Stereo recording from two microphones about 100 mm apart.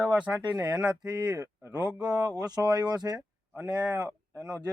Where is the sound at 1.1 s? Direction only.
40° right (ahead or behind).